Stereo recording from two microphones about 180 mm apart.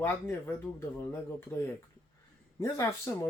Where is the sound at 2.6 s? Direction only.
15° left (ahead or behind).